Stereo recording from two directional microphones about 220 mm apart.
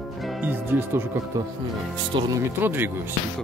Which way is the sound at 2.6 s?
10° right (ahead or behind).